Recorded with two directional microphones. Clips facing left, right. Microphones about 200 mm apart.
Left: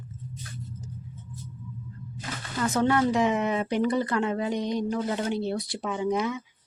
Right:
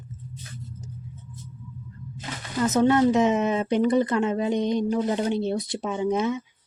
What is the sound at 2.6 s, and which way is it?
Speech, 20° right (ahead or behind).